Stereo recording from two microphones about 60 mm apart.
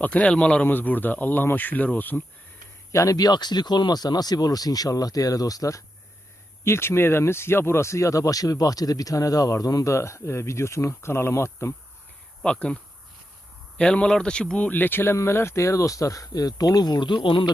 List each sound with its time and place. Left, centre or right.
0.0 s speech: left
2.9 s speech: left
6.7 s speech: left
9.9 s speech: left
12.4 s speech: centre; by 16.8 s left